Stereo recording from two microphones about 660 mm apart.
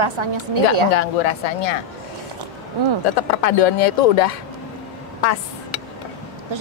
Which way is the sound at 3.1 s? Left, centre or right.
Left.